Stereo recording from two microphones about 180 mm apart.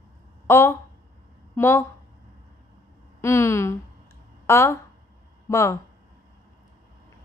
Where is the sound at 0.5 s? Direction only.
15° left (ahead or behind).